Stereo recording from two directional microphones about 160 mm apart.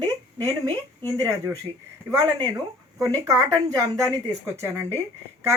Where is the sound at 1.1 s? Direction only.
20° right (ahead or behind).